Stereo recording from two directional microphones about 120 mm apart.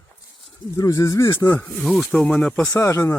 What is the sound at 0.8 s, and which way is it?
Speech, 25° left (ahead or behind).